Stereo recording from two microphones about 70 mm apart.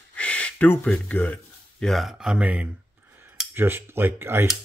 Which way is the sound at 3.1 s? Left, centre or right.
Right.